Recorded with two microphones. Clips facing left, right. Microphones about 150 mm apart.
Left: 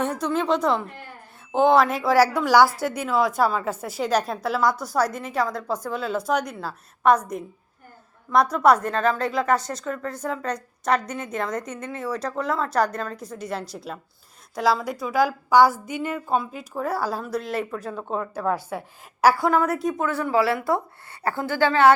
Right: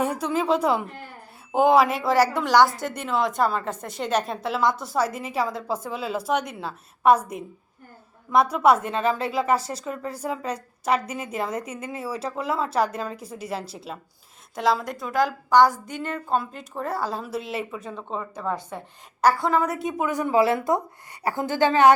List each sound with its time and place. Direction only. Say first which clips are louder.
0.0 s a woman's voice: even; 10° right (ahead or behind)
4.7 s a woman's voice: left 1 dB; 25° right (ahead or behind)
4.9 s speech: left 1 dB; 5° right (ahead or behind)
8.3 s a woman's voice: left 1 dB; 5° right (ahead or behind)
20.1 s a woman's voice: right 2 dB; 20° right (ahead or behind)